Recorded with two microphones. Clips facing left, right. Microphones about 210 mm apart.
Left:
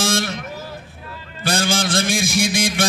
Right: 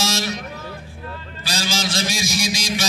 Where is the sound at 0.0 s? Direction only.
55° left (ahead or behind).